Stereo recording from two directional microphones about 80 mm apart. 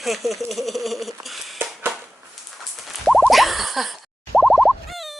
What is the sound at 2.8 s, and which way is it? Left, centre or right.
Fowl, centre.